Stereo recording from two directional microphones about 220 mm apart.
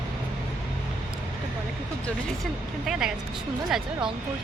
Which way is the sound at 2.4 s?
Centre (ahead or behind).